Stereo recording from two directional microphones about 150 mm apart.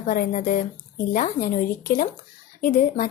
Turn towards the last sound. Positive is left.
turn(degrees=65)  # may be behind; listen again after turning